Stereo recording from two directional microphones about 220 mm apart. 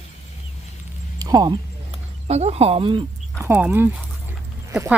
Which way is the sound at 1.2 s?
20° right (ahead or behind).